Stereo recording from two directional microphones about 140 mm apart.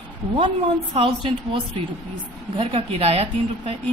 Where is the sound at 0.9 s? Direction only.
35° right (ahead or behind).